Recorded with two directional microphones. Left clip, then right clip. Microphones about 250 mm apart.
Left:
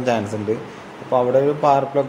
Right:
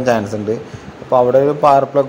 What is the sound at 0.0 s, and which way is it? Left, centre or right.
Speech, centre.